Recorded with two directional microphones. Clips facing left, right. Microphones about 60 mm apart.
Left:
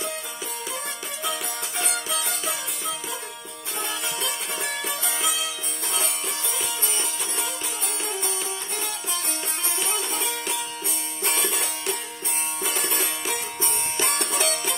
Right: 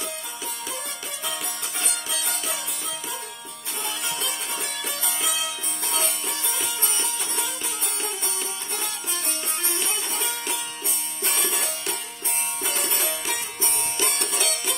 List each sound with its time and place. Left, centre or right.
11.2 s music: centre
13.6 s music: left